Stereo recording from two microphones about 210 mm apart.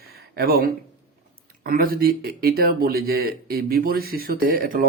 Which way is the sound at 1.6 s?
45° right (ahead or behind).